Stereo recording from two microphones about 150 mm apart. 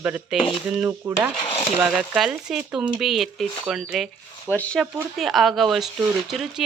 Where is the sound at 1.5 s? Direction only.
40° left (ahead or behind).